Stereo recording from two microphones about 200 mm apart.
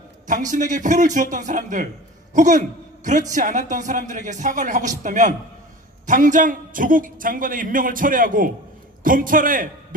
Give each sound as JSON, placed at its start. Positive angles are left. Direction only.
{"t": 0.3, "sound": "a man's voice", "side_deg": -40}